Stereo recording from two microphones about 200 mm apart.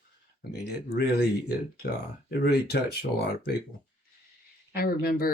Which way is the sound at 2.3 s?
50° left (ahead or behind).